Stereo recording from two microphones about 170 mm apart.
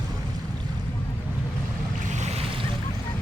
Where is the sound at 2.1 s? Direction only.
40° right (ahead or behind).